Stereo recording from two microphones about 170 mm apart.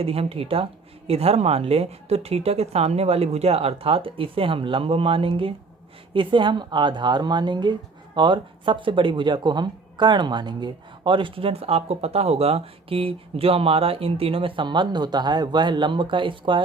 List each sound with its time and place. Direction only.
0.0 s a woman's voice: 35° right (ahead or behind)